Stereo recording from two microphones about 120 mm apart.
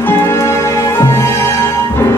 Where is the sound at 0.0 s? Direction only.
20° left (ahead or behind).